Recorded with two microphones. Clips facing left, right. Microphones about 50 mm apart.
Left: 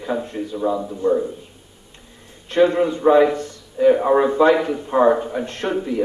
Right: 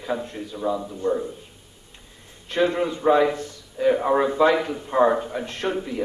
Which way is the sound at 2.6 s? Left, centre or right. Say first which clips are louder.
Left 6 dB; centre.